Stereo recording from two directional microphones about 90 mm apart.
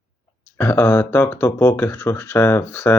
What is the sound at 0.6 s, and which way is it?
Speech, 25° left (ahead or behind).